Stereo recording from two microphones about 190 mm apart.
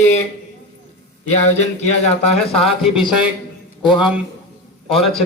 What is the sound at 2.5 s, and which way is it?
Speech, centre (ahead or behind).